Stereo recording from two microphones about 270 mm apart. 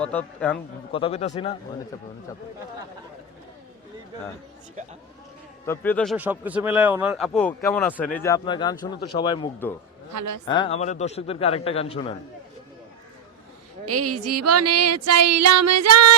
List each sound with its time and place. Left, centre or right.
0.0 s a man's voice: centre
0.9 s a man's voice: left
5.6 s a man's voice: centre
10.1 s a woman's voice: right
10.4 s a man's voice: centre
13.8 s a sound: right